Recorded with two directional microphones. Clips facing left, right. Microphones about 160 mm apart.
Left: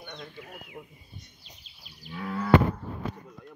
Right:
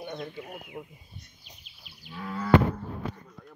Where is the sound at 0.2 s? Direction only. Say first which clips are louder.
Right 5 dB; 20° right (ahead or behind).